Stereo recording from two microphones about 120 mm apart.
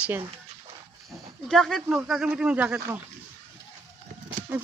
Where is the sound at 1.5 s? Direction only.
Centre (ahead or behind).